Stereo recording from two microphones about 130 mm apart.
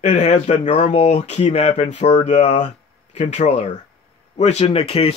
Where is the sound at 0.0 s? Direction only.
65° left (ahead or behind).